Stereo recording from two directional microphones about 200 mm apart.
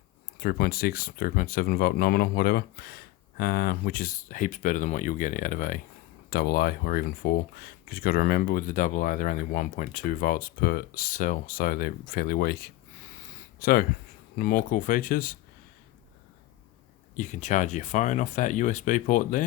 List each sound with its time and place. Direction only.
0.3 s speech: 50° left (ahead or behind)
17.2 s speech: 35° left (ahead or behind)